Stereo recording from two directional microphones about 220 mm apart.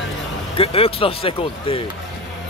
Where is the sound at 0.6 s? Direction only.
25° left (ahead or behind).